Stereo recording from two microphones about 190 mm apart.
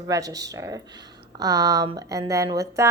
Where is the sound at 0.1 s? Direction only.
20° right (ahead or behind).